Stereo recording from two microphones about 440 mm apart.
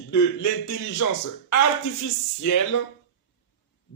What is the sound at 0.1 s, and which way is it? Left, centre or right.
Speech, left.